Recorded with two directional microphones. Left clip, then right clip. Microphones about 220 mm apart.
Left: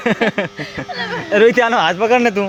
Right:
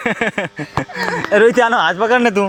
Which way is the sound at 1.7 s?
15° right (ahead or behind).